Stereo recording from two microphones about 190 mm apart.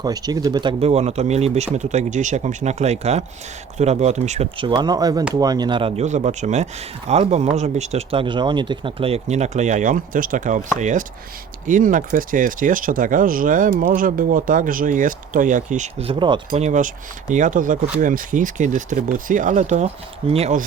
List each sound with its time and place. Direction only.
0.0 s speech: 20° right (ahead or behind)
16.6 s speech: 40° right (ahead or behind)